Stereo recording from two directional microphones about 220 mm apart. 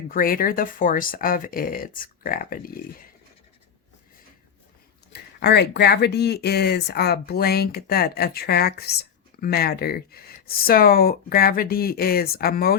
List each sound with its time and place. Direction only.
0.1 s speech: 40° left (ahead or behind)
5.1 s speech: 50° left (ahead or behind)